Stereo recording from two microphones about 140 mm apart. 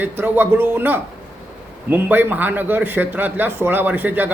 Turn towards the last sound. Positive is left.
turn(degrees=-15)  # may be behind; listen again after turning